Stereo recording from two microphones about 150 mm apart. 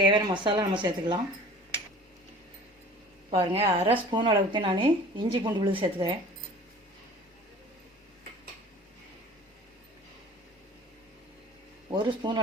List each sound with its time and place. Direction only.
0.0 s speech: 30° right (ahead or behind)
3.2 s a woman's voice: 45° right (ahead or behind)
11.9 s speech: 30° right (ahead or behind)